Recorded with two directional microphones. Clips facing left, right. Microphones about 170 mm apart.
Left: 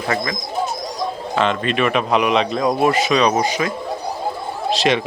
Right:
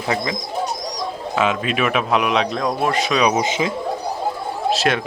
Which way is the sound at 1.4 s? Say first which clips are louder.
Left 1 dB; 5° right (ahead or behind).